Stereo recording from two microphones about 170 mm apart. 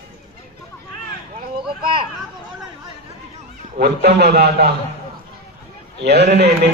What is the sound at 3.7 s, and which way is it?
A man's voice, 75° right (ahead or behind).